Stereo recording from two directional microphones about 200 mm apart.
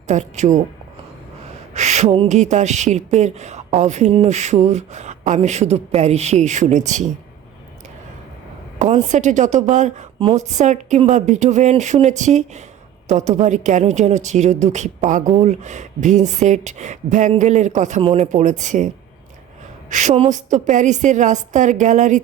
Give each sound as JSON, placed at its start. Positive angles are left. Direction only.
{"t": 0.1, "sound": "speech", "side_deg": -35}
{"t": 1.7, "sound": "a sound", "side_deg": -35}
{"t": 2.2, "sound": "speech", "side_deg": -35}
{"t": 8.8, "sound": "speech", "side_deg": -35}
{"t": 19.9, "sound": "speech", "side_deg": -35}